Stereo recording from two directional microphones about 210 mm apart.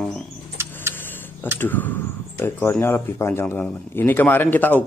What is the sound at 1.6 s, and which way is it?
Speech, 10° left (ahead or behind).